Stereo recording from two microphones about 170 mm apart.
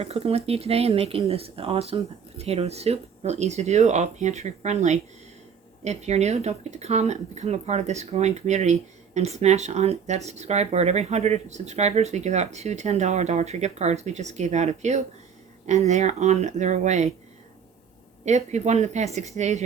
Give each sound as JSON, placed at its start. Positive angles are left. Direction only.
{"t": 0.0, "sound": "speech", "side_deg": -35}
{"t": 18.3, "sound": "speech", "side_deg": -45}